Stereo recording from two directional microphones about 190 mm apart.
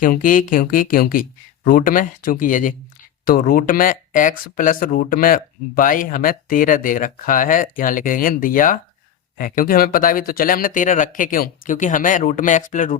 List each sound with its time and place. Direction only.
0.0 s speech: 45° left (ahead or behind)